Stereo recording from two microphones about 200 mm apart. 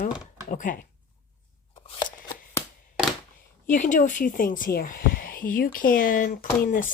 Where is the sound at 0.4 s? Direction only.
40° left (ahead or behind).